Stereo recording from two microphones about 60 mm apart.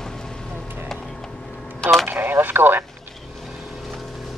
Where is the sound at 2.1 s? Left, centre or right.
Right.